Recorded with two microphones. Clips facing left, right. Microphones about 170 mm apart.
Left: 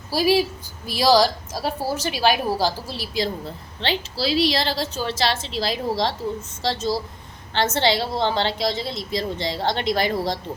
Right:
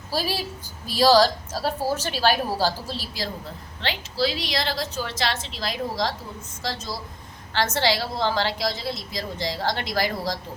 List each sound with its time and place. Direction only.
0.1 s a woman's voice: 10° left (ahead or behind)
3.8 s a woman's voice: 30° left (ahead or behind)